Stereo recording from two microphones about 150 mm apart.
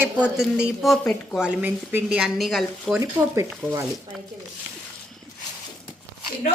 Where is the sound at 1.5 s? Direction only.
10° right (ahead or behind).